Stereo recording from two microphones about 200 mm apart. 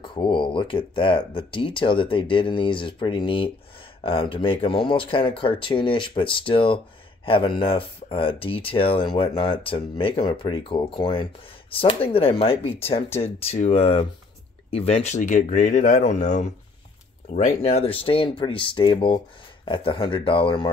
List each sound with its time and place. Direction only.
0.0 s speech: 25° left (ahead or behind)